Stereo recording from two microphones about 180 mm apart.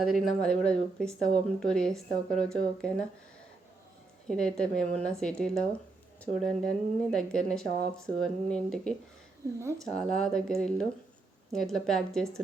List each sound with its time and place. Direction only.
0.0 s speech: centre (ahead or behind)
4.3 s speech: 5° left (ahead or behind)
9.6 s speech: 15° right (ahead or behind)
9.8 s speech: 5° left (ahead or behind)